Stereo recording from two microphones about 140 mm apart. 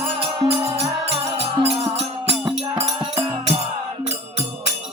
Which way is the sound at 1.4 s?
45° right (ahead or behind).